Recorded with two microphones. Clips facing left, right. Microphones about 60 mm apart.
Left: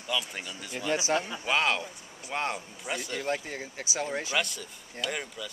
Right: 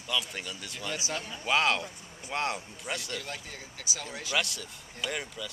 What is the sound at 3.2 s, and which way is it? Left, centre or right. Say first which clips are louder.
Speech: left 8 dB; left.